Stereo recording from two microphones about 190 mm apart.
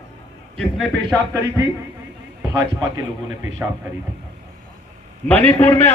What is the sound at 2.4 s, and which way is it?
Speech, 20° right (ahead or behind).